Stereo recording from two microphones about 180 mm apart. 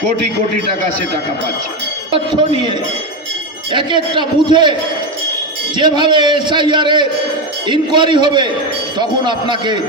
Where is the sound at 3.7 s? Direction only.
25° right (ahead or behind).